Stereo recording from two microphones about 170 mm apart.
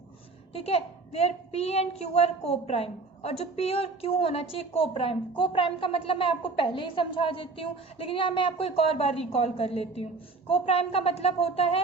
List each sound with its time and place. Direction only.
0.5 s a woman's voice: 35° left (ahead or behind)